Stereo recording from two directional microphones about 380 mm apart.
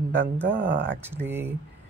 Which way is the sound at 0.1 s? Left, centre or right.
Centre.